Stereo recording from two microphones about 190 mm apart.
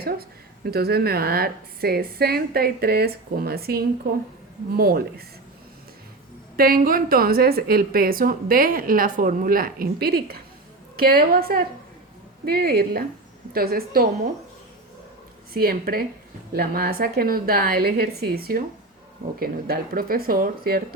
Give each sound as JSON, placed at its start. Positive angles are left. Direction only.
{"t": 0.0, "sound": "a woman's voice", "side_deg": -55}
{"t": 6.6, "sound": "a woman's voice", "side_deg": -50}
{"t": 15.5, "sound": "a woman's voice", "side_deg": -50}